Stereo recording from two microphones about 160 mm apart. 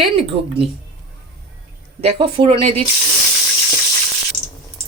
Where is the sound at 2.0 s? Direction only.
35° right (ahead or behind).